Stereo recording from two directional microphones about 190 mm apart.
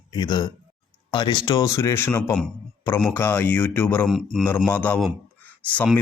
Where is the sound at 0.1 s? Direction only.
20° left (ahead or behind).